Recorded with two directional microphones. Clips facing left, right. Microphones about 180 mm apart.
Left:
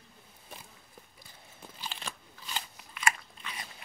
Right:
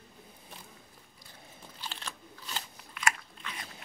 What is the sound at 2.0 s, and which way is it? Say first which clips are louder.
Crunch: left 1 dB; 10° left (ahead or behind).